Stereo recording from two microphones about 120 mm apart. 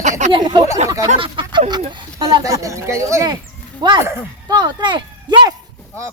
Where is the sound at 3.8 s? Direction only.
40° right (ahead or behind).